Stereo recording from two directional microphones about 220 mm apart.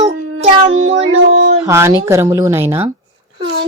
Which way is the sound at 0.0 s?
60° right (ahead or behind).